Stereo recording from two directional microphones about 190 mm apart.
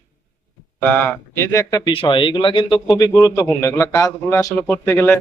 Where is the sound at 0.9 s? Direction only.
10° left (ahead or behind).